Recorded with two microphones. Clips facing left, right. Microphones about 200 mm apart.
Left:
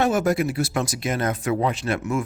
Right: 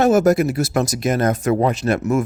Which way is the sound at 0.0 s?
40° right (ahead or behind).